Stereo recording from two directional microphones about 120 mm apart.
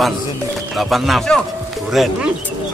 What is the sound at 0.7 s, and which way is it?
Speech, centre (ahead or behind).